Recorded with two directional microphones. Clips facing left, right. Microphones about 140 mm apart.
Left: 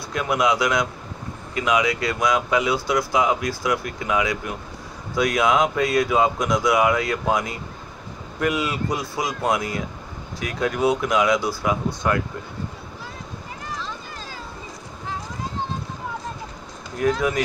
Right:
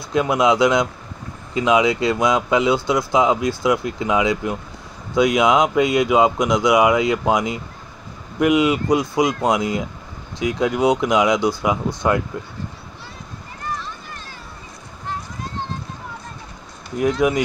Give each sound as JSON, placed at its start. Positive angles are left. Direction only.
{"t": 0.1, "sound": "speech", "side_deg": -25}
{"t": 13.7, "sound": "vehicle", "side_deg": 90}
{"t": 17.0, "sound": "speech", "side_deg": -15}